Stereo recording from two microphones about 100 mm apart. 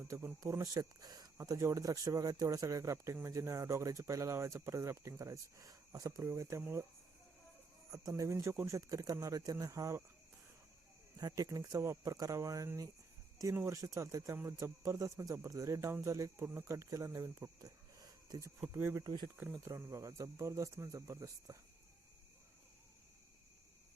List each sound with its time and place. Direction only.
0.0 s speech: 30° right (ahead or behind)
7.9 s speech: 35° right (ahead or behind)
11.2 s speech: 35° right (ahead or behind)
19.0 s speech: 45° right (ahead or behind)
19.6 s speech: 30° right (ahead or behind)